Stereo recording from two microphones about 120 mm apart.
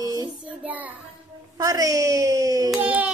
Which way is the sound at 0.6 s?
15° right (ahead or behind).